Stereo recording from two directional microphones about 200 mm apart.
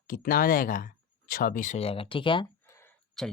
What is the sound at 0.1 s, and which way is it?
Speech, 45° left (ahead or behind).